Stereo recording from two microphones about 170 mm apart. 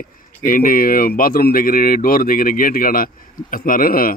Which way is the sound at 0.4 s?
55° left (ahead or behind).